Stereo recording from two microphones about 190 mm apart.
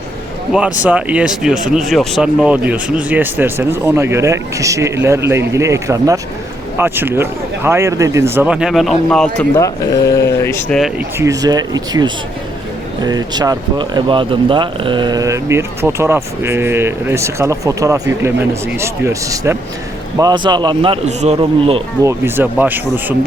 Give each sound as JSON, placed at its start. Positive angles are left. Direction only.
{"t": 0.5, "sound": "speech", "side_deg": -5}
{"t": 9.6, "sound": "speech", "side_deg": 15}
{"t": 11.2, "sound": "a man's voice", "side_deg": -20}
{"t": 22.0, "sound": "speech", "side_deg": -10}